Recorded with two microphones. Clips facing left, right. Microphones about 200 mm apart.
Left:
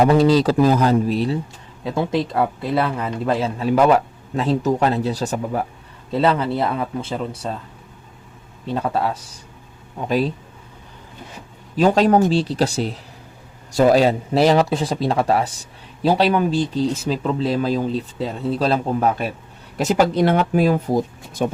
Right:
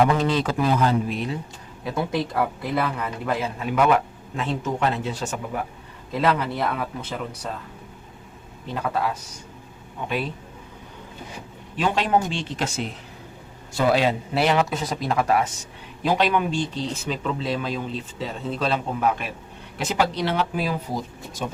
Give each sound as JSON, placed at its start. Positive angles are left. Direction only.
{"t": 0.0, "sound": "speech", "side_deg": 35}
{"t": 1.8, "sound": "speech", "side_deg": 25}
{"t": 8.6, "sound": "speech", "side_deg": 30}
{"t": 11.8, "sound": "speech", "side_deg": 40}
{"t": 19.8, "sound": "speech", "side_deg": 45}